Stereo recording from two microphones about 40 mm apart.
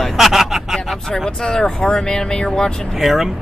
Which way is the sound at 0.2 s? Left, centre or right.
Centre.